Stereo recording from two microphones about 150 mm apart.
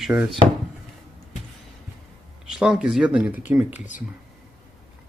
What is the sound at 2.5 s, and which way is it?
Speech, 5° right (ahead or behind).